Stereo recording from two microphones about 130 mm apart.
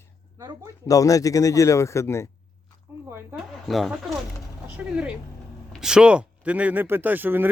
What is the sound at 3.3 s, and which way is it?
Speech, centre (ahead or behind).